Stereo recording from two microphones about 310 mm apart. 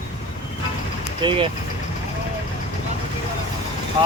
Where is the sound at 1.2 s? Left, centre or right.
Centre.